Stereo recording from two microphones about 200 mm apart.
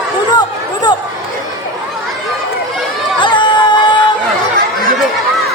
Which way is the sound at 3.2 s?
25° left (ahead or behind).